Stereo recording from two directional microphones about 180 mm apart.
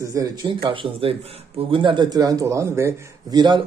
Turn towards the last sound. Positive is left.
turn(degrees=-20)  # may be behind; listen again after turning